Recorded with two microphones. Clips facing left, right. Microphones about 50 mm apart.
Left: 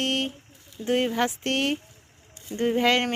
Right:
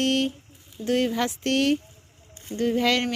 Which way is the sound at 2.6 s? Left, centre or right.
Left.